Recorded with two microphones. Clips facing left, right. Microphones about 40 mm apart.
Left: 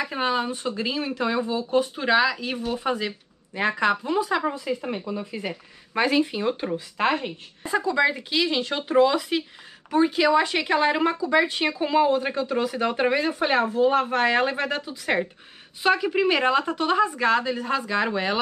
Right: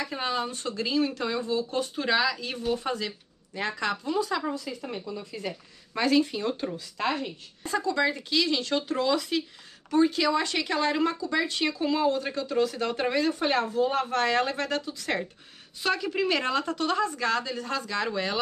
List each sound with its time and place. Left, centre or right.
0.0 s speech: centre
7.6 s speech: centre